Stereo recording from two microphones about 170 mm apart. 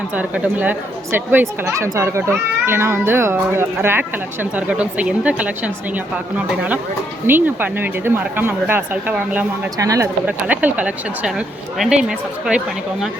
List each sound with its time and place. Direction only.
0.1 s speech: 10° right (ahead or behind)
9.7 s speech: 20° right (ahead or behind)
10.2 s speech: 10° right (ahead or behind)